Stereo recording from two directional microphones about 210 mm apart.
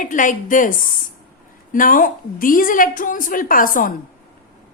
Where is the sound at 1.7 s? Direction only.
40° left (ahead or behind).